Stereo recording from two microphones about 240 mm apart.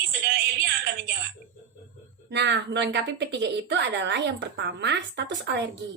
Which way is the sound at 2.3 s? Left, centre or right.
Right.